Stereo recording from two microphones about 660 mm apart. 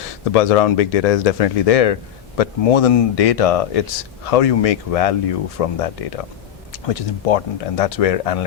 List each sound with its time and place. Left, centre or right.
0.3 s speech: left